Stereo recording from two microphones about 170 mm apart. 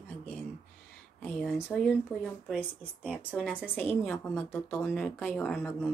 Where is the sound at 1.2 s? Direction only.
Centre (ahead or behind).